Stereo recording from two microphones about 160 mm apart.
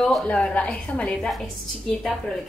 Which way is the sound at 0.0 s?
5° left (ahead or behind).